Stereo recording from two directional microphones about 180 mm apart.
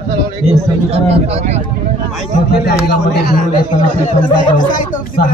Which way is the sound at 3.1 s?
55° left (ahead or behind).